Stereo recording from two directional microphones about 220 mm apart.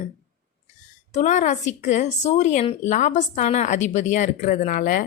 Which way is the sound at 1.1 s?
35° left (ahead or behind).